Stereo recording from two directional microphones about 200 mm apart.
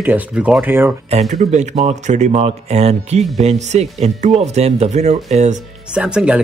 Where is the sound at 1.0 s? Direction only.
35° right (ahead or behind).